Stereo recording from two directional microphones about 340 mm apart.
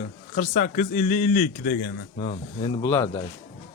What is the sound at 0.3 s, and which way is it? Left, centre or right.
Speech, left.